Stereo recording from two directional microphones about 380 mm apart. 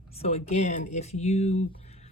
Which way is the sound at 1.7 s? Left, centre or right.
Centre.